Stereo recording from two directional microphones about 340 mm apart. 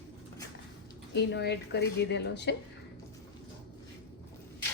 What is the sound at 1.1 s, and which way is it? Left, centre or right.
A woman's voice, left.